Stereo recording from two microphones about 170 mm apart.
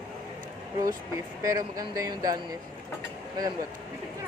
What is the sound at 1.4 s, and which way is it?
Speech, 20° right (ahead or behind).